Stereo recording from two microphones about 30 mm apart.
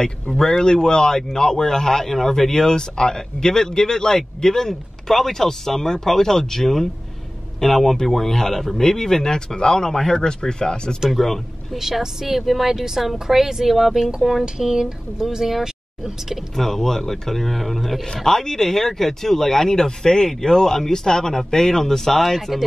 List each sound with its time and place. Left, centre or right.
0.0 s speech: left
11.1 s speech: centre
12.0 s speech: centre
16.5 s speech: centre
18.2 s speech: centre